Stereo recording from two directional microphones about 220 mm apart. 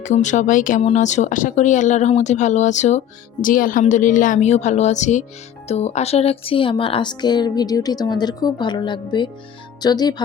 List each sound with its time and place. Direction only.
0.0 s speech: 35° left (ahead or behind); by 10.2 s 20° left (ahead or behind)